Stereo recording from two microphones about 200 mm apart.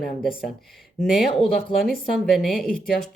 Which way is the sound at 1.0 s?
Centre (ahead or behind).